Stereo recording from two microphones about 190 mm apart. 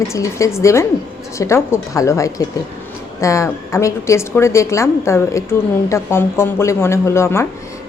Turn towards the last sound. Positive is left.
turn(degrees=15)  # may be behind; listen again after turning